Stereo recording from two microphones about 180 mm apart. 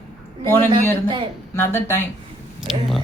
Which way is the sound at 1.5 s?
15° left (ahead or behind).